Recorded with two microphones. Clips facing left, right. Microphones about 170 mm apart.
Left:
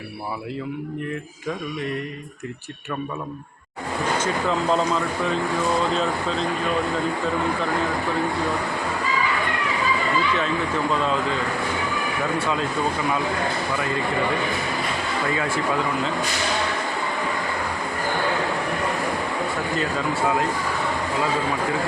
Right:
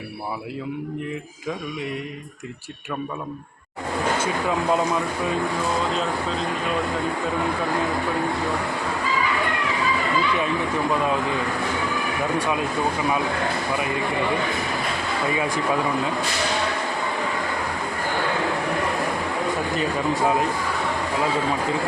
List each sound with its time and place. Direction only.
4.2 s speech: 10° right (ahead or behind)
11.0 s speech: 15° right (ahead or behind)
12.4 s speech: 15° right (ahead or behind)
15.3 s speech: 15° right (ahead or behind)
19.7 s speech: 20° right (ahead or behind)